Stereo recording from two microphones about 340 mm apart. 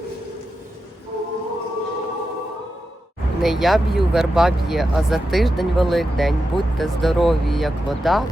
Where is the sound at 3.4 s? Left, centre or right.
Centre.